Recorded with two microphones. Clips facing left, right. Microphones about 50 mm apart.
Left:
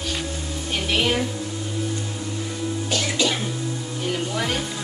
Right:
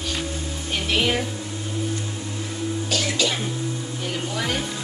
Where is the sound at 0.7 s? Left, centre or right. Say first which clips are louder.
Even; centre.